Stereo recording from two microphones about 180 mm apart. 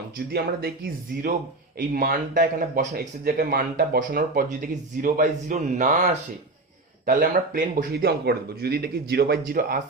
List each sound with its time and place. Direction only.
0.3 s a man's voice: 60° right (ahead or behind)
1.9 s a man's voice: 50° right (ahead or behind)